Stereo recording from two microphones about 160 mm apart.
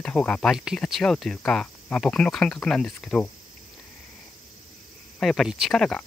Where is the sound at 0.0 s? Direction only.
5° left (ahead or behind).